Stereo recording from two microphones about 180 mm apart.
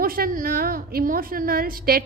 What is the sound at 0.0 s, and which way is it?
A woman's voice, 55° right (ahead or behind).